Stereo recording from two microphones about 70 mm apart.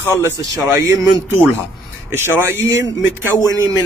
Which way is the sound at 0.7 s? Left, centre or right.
Right.